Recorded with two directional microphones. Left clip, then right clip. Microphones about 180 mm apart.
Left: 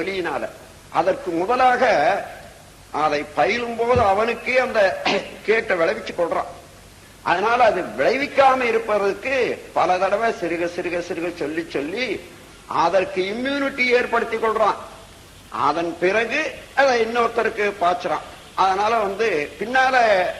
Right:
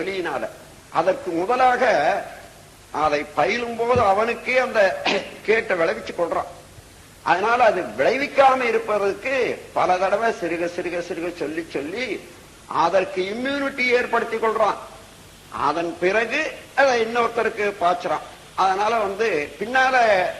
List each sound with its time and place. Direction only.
0.0 s a man's voice: 35° left (ahead or behind)